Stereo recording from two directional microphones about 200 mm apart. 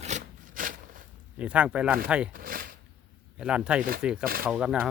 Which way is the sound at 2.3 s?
45° right (ahead or behind).